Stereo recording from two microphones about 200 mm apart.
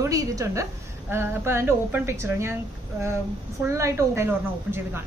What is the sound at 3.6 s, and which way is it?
A woman's voice, 15° right (ahead or behind).